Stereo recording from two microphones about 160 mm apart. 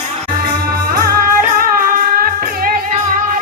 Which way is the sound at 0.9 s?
70° right (ahead or behind).